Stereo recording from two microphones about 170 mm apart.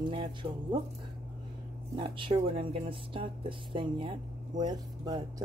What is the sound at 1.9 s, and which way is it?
Speech, 30° right (ahead or behind).